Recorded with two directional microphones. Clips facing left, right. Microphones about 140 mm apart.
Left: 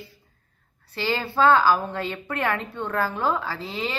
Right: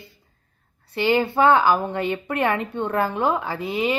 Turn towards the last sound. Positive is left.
turn(degrees=-15)  # may be behind; listen again after turning